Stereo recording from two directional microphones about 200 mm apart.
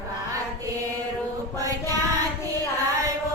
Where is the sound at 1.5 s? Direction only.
15° right (ahead or behind).